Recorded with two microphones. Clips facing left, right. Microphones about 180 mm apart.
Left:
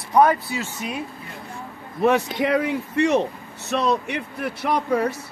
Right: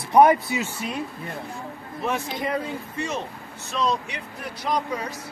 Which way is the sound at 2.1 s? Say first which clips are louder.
Left 7 dB; 75° left (ahead or behind).